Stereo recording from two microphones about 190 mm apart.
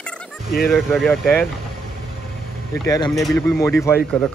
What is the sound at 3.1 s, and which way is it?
Speech, centre (ahead or behind).